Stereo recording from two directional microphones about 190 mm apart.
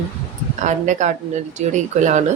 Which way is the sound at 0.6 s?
40° right (ahead or behind).